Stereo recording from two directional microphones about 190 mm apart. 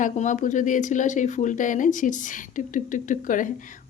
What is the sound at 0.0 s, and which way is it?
A woman's voice, 40° left (ahead or behind).